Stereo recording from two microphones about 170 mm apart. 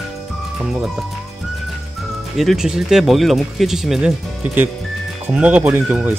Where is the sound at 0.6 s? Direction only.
5° right (ahead or behind).